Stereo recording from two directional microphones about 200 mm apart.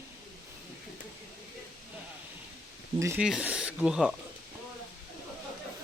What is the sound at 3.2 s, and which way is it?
Speech, 5° right (ahead or behind).